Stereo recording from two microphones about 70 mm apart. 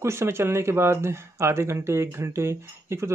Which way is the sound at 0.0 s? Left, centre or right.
Right.